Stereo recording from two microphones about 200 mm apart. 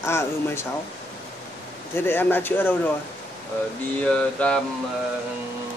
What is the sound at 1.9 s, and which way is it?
Speech, 10° left (ahead or behind).